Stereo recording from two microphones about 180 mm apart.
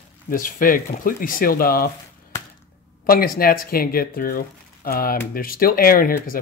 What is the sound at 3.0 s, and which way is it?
Speech, 55° left (ahead or behind).